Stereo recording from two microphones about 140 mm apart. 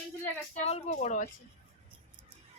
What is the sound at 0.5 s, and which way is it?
Speech, 55° left (ahead or behind).